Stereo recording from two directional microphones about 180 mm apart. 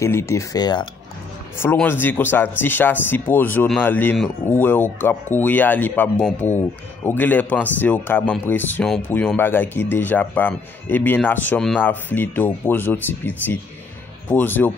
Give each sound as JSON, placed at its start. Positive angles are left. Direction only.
{"t": 0.0, "sound": "speech", "side_deg": 15}
{"t": 1.6, "sound": "speech", "side_deg": 10}
{"t": 14.3, "sound": "speech", "side_deg": 10}